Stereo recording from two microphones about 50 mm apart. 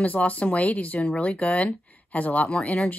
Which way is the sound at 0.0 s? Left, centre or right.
Left.